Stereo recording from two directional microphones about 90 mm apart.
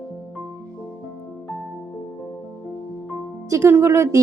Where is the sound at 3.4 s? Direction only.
30° right (ahead or behind).